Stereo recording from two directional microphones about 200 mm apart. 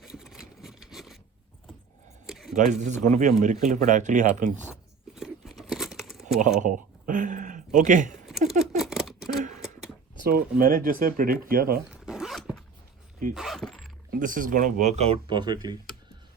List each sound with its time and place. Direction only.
0.0 s rub: centre (ahead or behind)
2.2 s keys jangling: centre (ahead or behind)
2.6 s speech: 40° right (ahead or behind)
4.7 s crunch: 5° right (ahead or behind)
6.6 s speech: 40° right (ahead or behind)
8.3 s scissors: centre (ahead or behind)
10.2 s speech: 50° right (ahead or behind)
11.9 s zipper: 5° right (ahead or behind)
13.3 s a sound: centre (ahead or behind)
14.1 s speech: 40° right (ahead or behind); by 15.8 s 20° right (ahead or behind)